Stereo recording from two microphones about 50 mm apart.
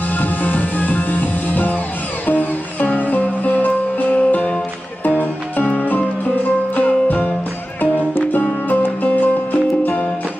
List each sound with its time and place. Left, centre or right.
0.1 s music: left
8.6 s music: left